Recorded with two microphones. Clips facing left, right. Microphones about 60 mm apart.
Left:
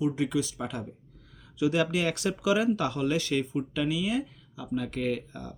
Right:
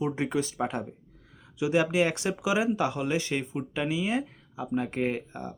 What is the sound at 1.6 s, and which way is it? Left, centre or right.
Speech, right.